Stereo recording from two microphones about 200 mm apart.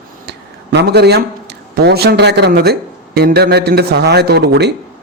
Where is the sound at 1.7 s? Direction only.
55° right (ahead or behind).